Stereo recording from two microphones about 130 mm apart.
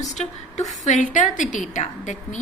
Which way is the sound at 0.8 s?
75° left (ahead or behind).